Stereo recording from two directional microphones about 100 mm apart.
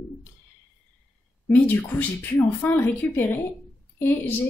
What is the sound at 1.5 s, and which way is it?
Speech, 15° left (ahead or behind).